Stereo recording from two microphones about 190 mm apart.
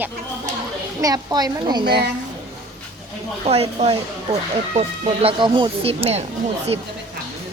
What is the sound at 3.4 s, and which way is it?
Speech, 35° right (ahead or behind).